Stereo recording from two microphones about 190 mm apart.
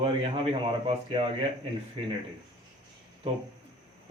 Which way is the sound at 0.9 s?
30° right (ahead or behind).